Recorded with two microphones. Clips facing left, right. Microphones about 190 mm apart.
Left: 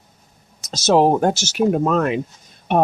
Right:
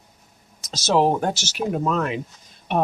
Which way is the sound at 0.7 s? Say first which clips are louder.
Left 4 dB; 45° left (ahead or behind).